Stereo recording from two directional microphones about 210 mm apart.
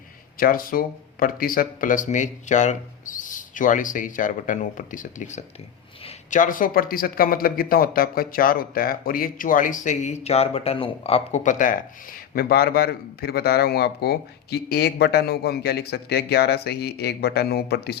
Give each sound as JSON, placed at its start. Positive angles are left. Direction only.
{"t": 0.3, "sound": "a man's voice", "side_deg": 45}